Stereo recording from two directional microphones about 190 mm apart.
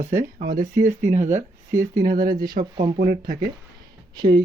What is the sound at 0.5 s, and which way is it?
Speech, 50° right (ahead or behind).